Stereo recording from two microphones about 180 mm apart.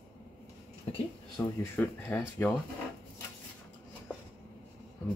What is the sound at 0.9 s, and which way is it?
Speech, 35° left (ahead or behind).